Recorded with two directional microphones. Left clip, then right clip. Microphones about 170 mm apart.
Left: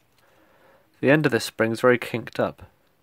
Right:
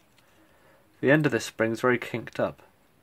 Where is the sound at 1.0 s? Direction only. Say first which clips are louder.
Left 3 dB; 50° left (ahead or behind).